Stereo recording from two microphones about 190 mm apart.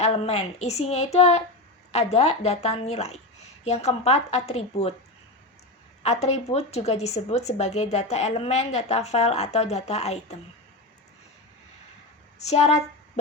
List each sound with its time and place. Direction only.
0.0 s a woman's voice: 35° left (ahead or behind)
6.0 s a woman's voice: 35° left (ahead or behind)
12.4 s a woman's voice: 35° left (ahead or behind)